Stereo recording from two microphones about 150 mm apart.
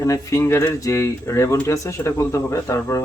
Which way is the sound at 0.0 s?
20° left (ahead or behind).